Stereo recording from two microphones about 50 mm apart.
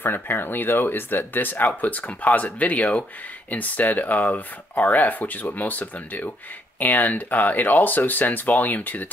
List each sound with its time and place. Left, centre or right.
0.0 s speech: left